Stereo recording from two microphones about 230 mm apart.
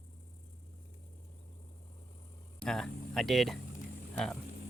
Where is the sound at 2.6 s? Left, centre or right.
Centre.